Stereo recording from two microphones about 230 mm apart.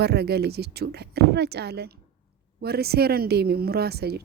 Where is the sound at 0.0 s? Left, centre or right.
Right.